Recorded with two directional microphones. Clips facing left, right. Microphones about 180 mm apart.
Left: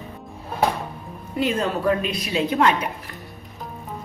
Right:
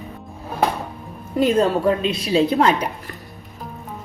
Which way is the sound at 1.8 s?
30° right (ahead or behind).